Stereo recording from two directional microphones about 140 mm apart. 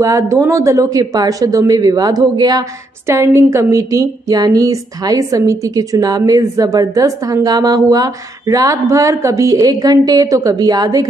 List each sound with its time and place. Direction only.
0.0 s a woman's voice: 20° right (ahead or behind)